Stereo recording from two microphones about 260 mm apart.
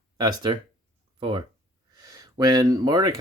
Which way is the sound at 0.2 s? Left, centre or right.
Centre.